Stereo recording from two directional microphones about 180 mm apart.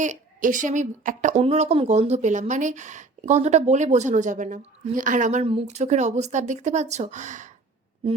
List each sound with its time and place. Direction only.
0.0 s a woman's voice: 45° right (ahead or behind)